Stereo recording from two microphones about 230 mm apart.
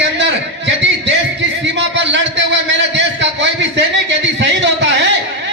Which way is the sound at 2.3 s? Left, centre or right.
Right.